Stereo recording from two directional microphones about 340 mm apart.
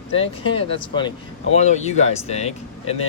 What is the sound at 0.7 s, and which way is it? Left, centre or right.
Speech, centre.